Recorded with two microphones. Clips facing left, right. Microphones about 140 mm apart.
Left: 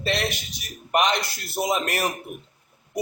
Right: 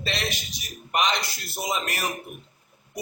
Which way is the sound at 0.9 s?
55° left (ahead or behind).